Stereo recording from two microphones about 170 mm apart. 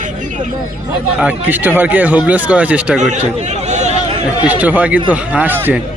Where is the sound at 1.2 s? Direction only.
10° right (ahead or behind).